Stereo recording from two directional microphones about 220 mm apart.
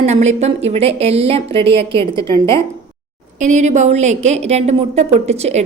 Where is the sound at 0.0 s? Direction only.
30° right (ahead or behind).